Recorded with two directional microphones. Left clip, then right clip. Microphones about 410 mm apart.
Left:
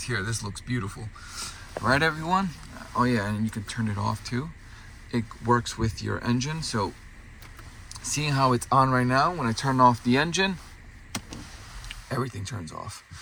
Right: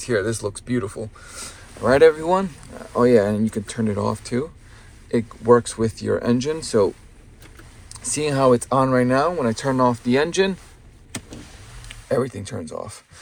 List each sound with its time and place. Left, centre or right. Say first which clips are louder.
0.0 s speech: right 9 dB; centre
12.0 s speech: right 10 dB; centre